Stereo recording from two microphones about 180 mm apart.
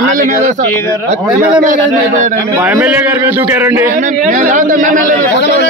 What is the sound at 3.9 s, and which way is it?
A man's voice, 50° right (ahead or behind).